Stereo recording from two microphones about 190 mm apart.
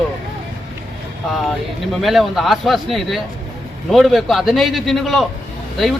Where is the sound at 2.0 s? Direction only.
Centre (ahead or behind).